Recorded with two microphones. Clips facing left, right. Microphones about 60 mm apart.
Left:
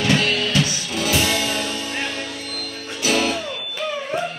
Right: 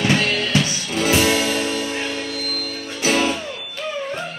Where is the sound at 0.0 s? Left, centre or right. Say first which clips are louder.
Even; right.